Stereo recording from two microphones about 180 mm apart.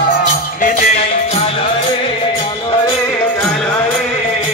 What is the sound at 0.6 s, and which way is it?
Music, 50° left (ahead or behind).